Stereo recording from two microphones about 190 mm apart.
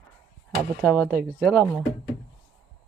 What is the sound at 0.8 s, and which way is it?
A woman's voice, 10° left (ahead or behind).